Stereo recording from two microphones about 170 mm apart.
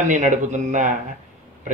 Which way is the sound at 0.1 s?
45° right (ahead or behind).